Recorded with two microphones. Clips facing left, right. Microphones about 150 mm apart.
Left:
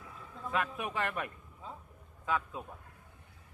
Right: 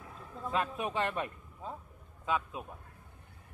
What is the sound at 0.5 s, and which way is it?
A man's voice, 30° right (ahead or behind).